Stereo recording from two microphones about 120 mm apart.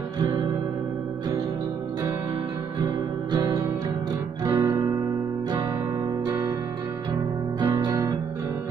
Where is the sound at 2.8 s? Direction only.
35° right (ahead or behind).